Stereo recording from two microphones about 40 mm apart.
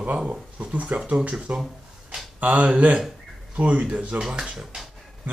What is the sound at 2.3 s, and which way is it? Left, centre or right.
Speech, right.